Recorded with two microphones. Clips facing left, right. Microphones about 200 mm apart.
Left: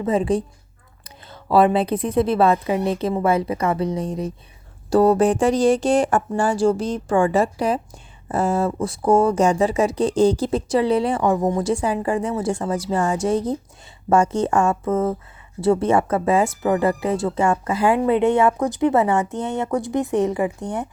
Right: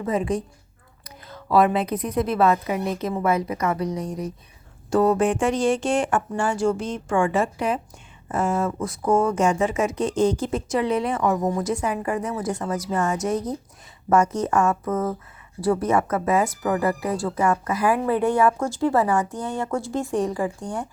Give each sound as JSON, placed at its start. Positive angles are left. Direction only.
{"t": 0.0, "sound": "speech", "side_deg": 30}